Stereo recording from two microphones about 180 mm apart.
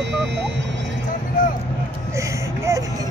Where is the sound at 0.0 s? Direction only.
75° right (ahead or behind).